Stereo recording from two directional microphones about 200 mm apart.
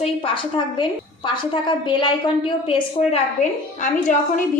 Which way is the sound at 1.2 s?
25° left (ahead or behind).